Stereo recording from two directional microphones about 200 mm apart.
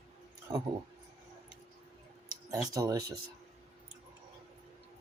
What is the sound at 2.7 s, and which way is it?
Speech, 15° right (ahead or behind).